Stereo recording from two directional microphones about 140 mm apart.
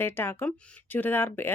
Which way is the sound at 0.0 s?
15° left (ahead or behind).